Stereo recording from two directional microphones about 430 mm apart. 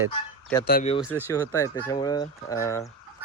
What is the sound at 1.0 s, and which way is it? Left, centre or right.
Speech, centre.